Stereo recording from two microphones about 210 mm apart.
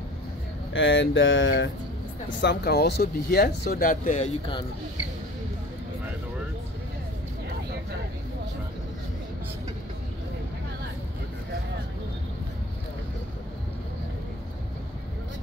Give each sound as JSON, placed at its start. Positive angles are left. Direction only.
{"t": 0.7, "sound": "speech", "side_deg": 65}
{"t": 2.4, "sound": "speech", "side_deg": 50}